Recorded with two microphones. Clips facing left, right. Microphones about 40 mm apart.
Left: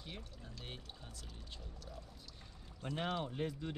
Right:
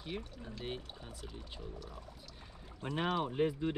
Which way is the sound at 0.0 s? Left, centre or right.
Centre.